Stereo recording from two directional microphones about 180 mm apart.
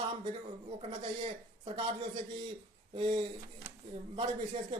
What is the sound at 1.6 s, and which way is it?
Speech, 25° right (ahead or behind).